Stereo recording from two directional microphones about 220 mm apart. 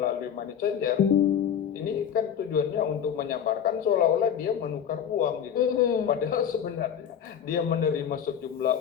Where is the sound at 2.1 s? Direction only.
40° left (ahead or behind).